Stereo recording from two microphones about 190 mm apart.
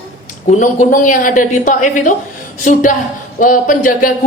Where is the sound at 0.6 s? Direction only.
45° left (ahead or behind).